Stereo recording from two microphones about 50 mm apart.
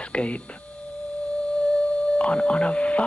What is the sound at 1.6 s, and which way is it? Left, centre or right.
Music, left.